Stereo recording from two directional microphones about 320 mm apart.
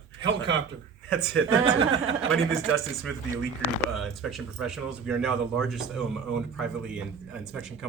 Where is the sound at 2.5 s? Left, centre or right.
Centre.